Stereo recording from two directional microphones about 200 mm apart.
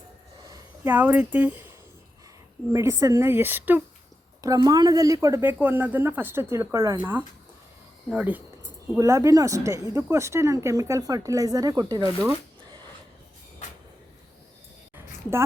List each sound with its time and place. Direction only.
0.5 s speech: 10° right (ahead or behind)
2.7 s speech: 15° right (ahead or behind)
14.9 s a sound: 10° right (ahead or behind)